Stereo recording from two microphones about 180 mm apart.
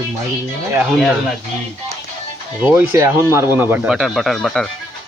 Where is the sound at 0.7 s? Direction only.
Centre (ahead or behind).